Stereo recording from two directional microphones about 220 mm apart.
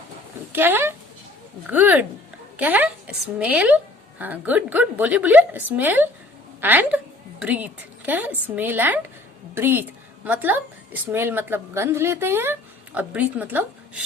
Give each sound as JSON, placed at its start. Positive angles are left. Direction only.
{"t": 0.5, "sound": "a woman's voice", "side_deg": -10}